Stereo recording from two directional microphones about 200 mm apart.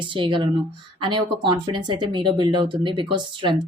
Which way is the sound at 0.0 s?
25° right (ahead or behind).